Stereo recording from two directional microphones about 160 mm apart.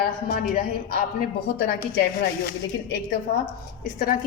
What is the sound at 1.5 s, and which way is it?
Speech, 85° left.